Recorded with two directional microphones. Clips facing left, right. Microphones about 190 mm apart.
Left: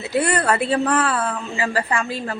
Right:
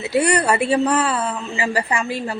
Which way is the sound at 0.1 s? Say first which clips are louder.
Right 2 dB; 15° right (ahead or behind).